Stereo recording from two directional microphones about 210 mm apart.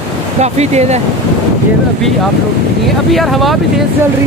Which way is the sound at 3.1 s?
Centre (ahead or behind).